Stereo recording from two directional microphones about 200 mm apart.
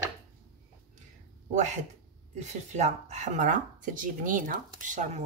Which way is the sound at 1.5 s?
35° right (ahead or behind).